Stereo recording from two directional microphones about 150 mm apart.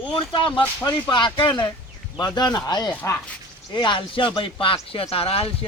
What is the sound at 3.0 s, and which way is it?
Speech, 15° left (ahead or behind).